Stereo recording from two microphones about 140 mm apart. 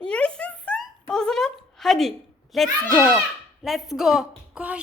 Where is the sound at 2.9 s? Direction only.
15° left (ahead or behind).